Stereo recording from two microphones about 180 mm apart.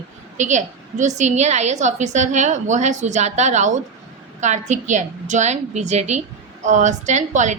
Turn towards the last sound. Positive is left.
turn(degrees=-40)  # may be behind; listen again after turning